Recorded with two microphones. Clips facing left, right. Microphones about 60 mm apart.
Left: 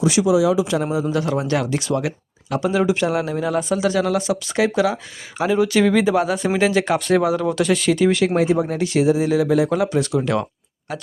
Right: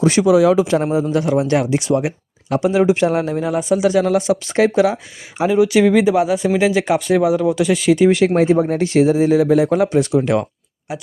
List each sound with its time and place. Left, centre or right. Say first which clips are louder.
0.0 s speech: right 4 dB; right
1.1 s speech: right 4 dB; right
3.3 s speech: right 3 dB; centre
5.5 s speech: right 4 dB; centre
7.9 s speech: right 4 dB; right